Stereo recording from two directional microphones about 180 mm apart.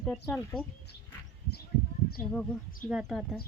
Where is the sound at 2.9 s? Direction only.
Centre (ahead or behind).